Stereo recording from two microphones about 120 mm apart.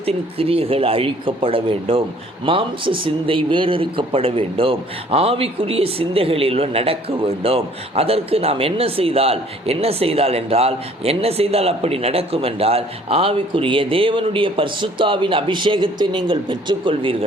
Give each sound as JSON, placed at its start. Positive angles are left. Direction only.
{"t": 0.0, "sound": "speech", "side_deg": -55}